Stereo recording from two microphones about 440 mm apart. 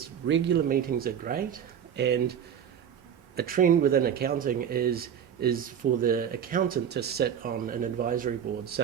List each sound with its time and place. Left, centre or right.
0.0 s speech: right